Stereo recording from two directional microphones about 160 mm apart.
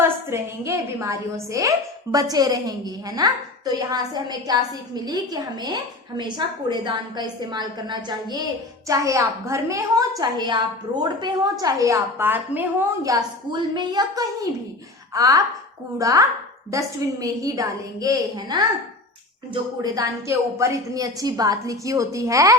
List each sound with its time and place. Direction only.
0.0 s a woman's voice: 15° right (ahead or behind)
19.8 s a woman's voice: 20° right (ahead or behind)